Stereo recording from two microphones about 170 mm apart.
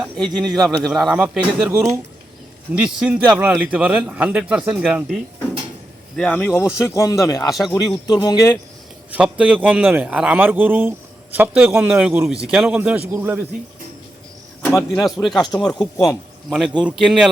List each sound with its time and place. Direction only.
0.0 s a man's voice: centre (ahead or behind)
6.1 s speech: 5° left (ahead or behind)
6.6 s speech: 20° left (ahead or behind)
7.4 s speech: centre (ahead or behind)
8.0 s speech: 20° left (ahead or behind)
9.1 s a man's voice: 5° right (ahead or behind)
14.6 s cricket: 5° left (ahead or behind)
15.0 s speech: centre (ahead or behind)